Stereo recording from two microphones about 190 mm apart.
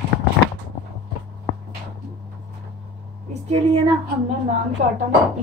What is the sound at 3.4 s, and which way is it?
Cutlery, 30° right (ahead or behind).